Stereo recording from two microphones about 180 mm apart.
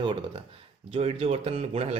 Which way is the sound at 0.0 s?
30° right (ahead or behind).